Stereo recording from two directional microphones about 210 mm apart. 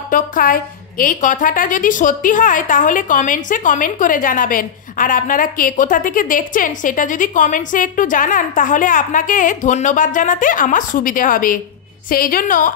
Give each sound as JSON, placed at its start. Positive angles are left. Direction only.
{"t": 0.1, "sound": "a woman's voice", "side_deg": 40}